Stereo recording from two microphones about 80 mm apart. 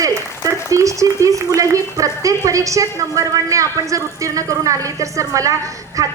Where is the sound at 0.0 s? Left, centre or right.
Right.